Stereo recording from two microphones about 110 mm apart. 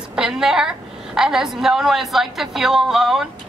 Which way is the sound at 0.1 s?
5° right (ahead or behind).